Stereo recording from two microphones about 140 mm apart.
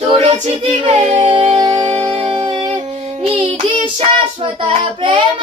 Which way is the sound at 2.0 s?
45° right (ahead or behind).